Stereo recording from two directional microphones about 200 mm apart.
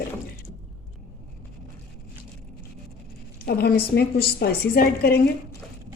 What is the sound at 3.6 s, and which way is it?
Speech, 55° left (ahead or behind).